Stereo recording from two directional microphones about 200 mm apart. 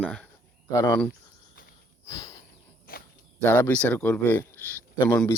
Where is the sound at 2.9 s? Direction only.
45° left (ahead or behind).